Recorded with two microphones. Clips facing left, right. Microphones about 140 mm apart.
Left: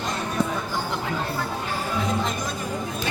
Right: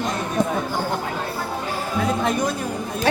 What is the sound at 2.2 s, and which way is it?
Speech, 60° right (ahead or behind).